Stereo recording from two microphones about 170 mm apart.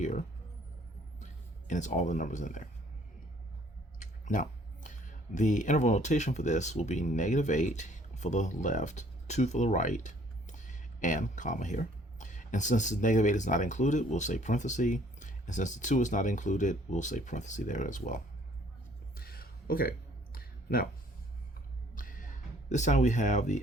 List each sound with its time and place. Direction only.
0.0 s speech: 45° left (ahead or behind)
4.0 s speech: 50° left (ahead or behind)
19.1 s music: 65° left (ahead or behind)
20.3 s a sound: 60° left (ahead or behind)
21.9 s music: 50° left (ahead or behind)